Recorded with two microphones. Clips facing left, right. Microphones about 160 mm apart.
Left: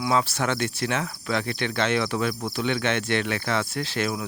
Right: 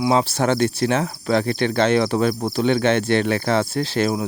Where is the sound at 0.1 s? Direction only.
30° right (ahead or behind).